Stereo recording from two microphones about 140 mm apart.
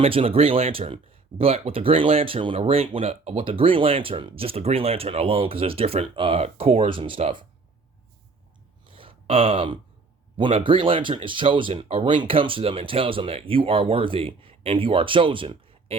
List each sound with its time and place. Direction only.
0.0 s speech: 40° right (ahead or behind)
8.9 s a sound: 40° right (ahead or behind)
10.3 s speech: 35° right (ahead or behind)